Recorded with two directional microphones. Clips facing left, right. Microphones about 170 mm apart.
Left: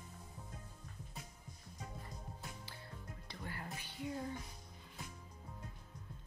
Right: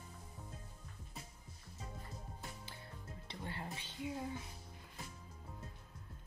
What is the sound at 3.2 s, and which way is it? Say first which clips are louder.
Music: right 2 dB; 25° right (ahead or behind).